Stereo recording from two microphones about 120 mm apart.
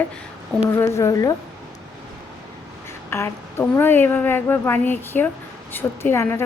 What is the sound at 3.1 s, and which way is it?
A woman's voice, 20° left (ahead or behind).